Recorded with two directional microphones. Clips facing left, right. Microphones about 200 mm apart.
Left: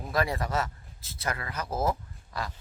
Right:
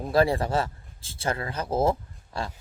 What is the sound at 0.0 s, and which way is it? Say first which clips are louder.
A man's voice: right 7 dB; 30° right (ahead or behind).